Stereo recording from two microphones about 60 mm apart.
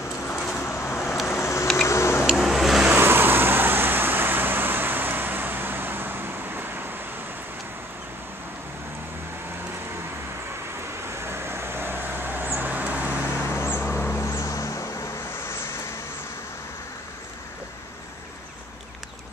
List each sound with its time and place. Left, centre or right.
0.3 s vehicle: centre
0.8 s vehicle: left
2.2 s vehicle: centre
2.9 s vehicle: right
11.1 s vehicle: right
13.8 s music: left
15.3 s vehicle: left